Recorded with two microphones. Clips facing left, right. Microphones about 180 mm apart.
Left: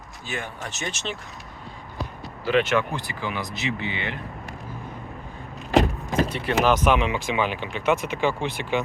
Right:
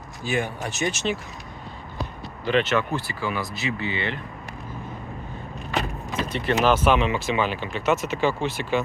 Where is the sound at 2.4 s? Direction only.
10° left (ahead or behind).